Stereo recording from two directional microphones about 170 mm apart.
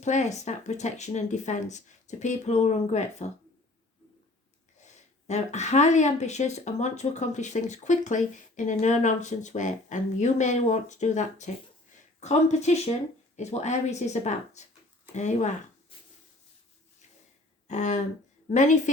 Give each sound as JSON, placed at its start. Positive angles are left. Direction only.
{"t": 0.0, "sound": "speech", "side_deg": 45}
{"t": 5.3, "sound": "speech", "side_deg": 45}
{"t": 17.7, "sound": "speech", "side_deg": 45}